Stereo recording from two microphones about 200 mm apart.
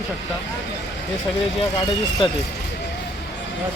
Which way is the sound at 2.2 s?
25° left (ahead or behind).